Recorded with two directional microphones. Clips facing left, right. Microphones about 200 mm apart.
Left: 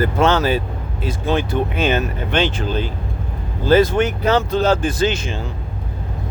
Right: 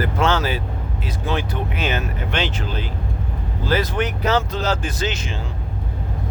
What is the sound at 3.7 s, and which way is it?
Speech, 25° left (ahead or behind).